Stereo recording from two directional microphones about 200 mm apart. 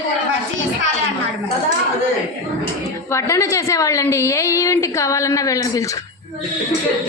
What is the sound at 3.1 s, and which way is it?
A woman's voice, 15° left (ahead or behind).